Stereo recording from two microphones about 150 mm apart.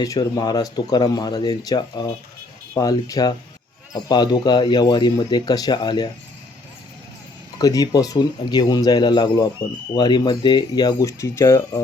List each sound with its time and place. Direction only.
0.0 s speech: 25° left (ahead or behind)
7.6 s speech: 25° left (ahead or behind)